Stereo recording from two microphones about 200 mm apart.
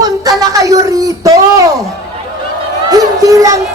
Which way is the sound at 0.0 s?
20° right (ahead or behind).